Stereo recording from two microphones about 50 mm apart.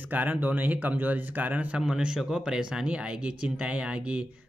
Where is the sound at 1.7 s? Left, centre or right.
Centre.